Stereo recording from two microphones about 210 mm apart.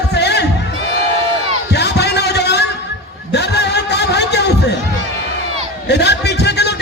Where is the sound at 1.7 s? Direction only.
50° left (ahead or behind).